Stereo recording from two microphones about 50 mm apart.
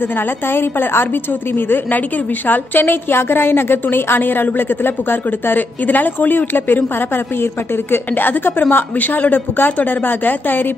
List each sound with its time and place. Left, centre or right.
0.5 s a woman's voice: left
2.4 s a woman's voice: left
7.9 s a woman's voice: left